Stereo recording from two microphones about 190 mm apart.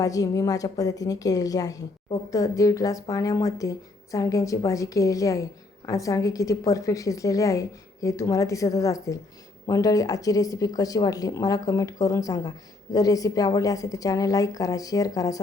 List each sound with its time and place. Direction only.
0.0 s a woman's voice: 20° left (ahead or behind)